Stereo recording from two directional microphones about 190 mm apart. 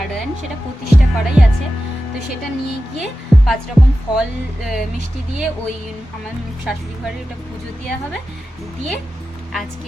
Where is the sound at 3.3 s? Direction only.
Centre (ahead or behind).